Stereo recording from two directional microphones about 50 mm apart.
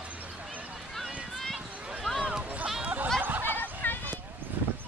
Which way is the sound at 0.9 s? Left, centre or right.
Centre.